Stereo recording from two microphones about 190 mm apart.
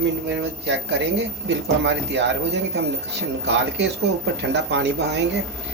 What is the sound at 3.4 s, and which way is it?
A man's voice, 70° right (ahead or behind).